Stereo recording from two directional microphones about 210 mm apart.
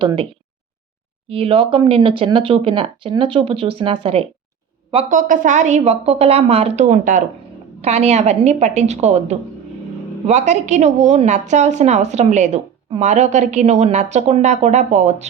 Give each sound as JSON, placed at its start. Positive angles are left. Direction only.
{"t": 0.0, "sound": "speech", "side_deg": -25}
{"t": 1.3, "sound": "speech", "side_deg": -25}
{"t": 5.0, "sound": "a woman's voice", "side_deg": -40}